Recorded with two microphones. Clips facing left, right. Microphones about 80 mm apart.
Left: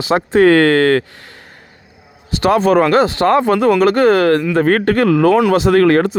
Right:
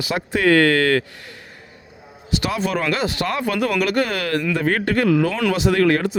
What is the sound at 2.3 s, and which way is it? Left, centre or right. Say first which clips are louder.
Speech: left 10 dB; left.